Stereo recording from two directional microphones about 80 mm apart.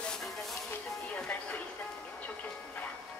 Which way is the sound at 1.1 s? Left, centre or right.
Centre.